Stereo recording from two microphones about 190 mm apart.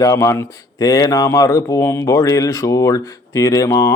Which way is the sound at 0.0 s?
15° left (ahead or behind).